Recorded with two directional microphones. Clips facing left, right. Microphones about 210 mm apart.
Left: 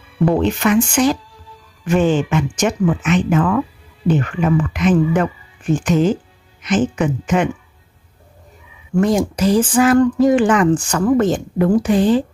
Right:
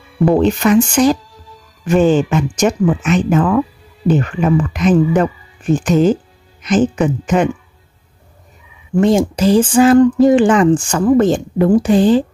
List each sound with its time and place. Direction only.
0.4 s speech: 35° right (ahead or behind)
9.0 s speech: 25° right (ahead or behind)